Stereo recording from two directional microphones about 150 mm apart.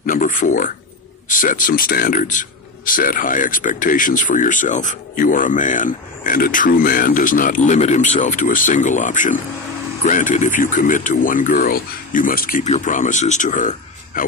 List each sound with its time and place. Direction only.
0.0 s a sound: 65° left (ahead or behind)
1.3 s speech: 60° left (ahead or behind)
12.6 s speech: 55° left (ahead or behind)